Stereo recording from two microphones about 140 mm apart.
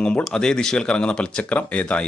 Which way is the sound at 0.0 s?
5° left (ahead or behind).